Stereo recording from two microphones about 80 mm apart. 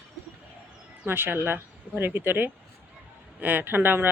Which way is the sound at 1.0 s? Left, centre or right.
Right.